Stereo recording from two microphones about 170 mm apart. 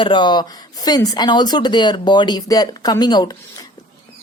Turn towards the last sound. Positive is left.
turn(degrees=25)  # may be behind; listen again after turning